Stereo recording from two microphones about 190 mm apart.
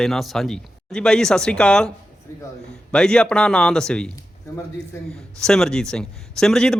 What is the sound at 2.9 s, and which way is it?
Speech, 5° left (ahead or behind).